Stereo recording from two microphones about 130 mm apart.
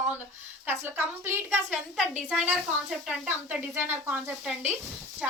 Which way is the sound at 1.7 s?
5° right (ahead or behind).